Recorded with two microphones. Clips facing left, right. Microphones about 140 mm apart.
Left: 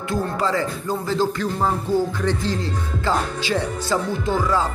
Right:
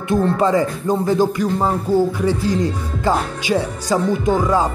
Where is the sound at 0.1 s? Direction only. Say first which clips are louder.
Right 7 dB; 20° right (ahead or behind).